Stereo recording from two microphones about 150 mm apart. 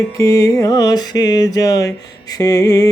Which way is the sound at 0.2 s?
25° left (ahead or behind).